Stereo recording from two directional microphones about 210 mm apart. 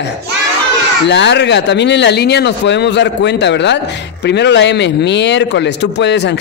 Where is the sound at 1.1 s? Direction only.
55° left (ahead or behind).